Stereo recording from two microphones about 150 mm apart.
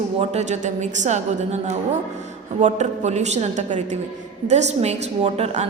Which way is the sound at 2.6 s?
55° right (ahead or behind).